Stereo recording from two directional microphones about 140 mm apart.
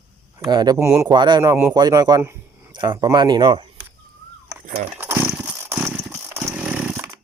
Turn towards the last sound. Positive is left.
turn(degrees=-15)  # may be behind; listen again after turning